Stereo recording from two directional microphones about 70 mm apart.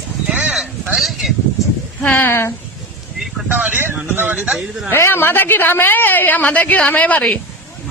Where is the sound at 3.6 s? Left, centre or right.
Right.